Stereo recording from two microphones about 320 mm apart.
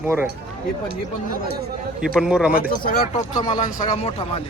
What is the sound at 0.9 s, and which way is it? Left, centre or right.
Speech, right.